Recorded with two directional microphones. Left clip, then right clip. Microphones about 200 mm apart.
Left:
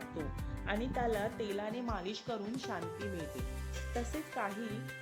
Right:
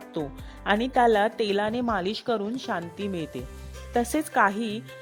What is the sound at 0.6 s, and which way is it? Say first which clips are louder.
A woman's voice: right 15 dB; 45° right (ahead or behind).